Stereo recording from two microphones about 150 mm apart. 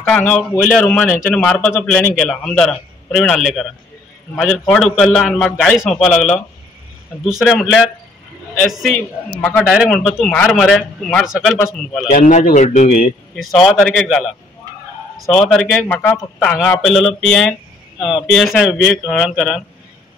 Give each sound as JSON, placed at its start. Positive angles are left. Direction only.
{"t": 0.0, "sound": "a man's voice", "side_deg": 5}
{"t": 0.4, "sound": "speech", "side_deg": -5}
{"t": 4.6, "sound": "a man's voice", "side_deg": 5}
{"t": 12.1, "sound": "speech", "side_deg": 50}
{"t": 13.7, "sound": "speech", "side_deg": 0}